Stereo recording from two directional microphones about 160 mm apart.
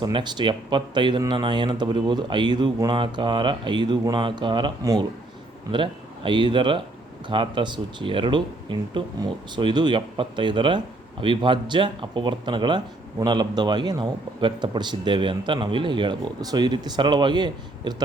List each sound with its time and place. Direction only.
0.0 s speech: 30° right (ahead or behind)